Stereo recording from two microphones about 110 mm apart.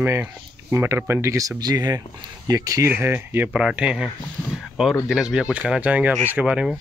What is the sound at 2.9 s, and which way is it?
Speech, 20° right (ahead or behind).